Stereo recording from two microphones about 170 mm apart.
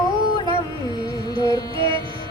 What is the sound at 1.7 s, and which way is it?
Music, 30° right (ahead or behind).